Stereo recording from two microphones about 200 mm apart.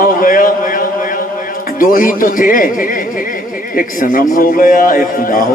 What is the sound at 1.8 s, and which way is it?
A man's voice, 45° left (ahead or behind).